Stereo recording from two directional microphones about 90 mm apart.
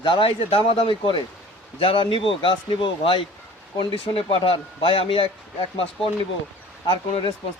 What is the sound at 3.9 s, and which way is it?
Speech, 85° left.